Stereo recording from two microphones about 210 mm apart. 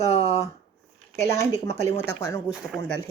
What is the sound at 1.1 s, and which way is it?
Speech, 15° left (ahead or behind).